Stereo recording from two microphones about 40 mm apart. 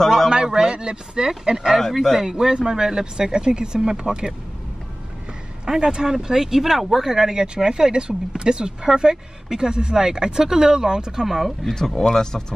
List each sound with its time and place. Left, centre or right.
0.3 s speech: centre
1.7 s speech: centre
2.1 s speech: centre
5.7 s speech: centre
11.2 s speech: centre
11.6 s speech: centre